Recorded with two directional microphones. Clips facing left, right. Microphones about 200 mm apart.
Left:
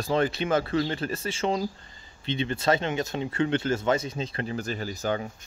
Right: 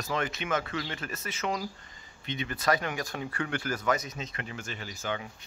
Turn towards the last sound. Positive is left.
turn(degrees=40)  # may be behind; listen again after turning